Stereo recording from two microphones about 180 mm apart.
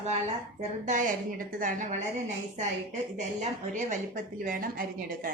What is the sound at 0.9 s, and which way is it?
Speech, 45° right (ahead or behind).